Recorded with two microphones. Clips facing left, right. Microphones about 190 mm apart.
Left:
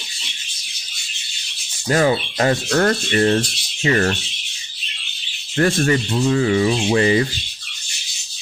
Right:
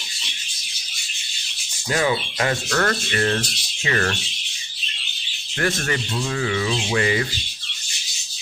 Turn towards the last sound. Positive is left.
turn(degrees=30)  # may be behind; listen again after turning